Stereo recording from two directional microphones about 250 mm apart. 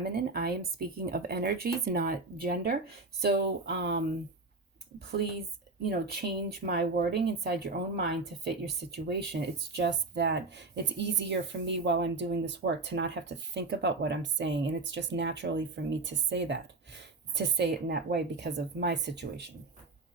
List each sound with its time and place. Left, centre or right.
0.0 s speech: right